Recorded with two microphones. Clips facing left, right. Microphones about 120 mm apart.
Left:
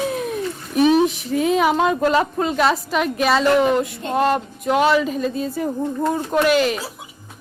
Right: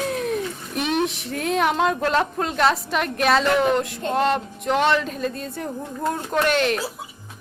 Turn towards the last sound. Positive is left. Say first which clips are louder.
# left 3 dB
turn(degrees=0)  # may be behind; listen again after turning